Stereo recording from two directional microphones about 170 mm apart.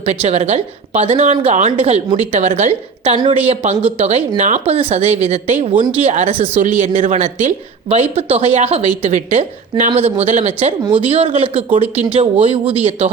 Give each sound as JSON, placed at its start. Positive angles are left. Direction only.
{"t": 0.0, "sound": "a woman's voice", "side_deg": -35}